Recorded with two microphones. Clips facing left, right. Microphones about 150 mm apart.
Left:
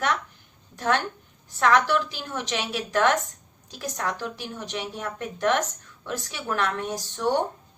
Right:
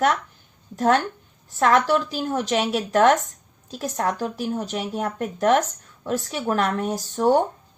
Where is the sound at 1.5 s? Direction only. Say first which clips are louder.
Right 3 dB; 40° right (ahead or behind).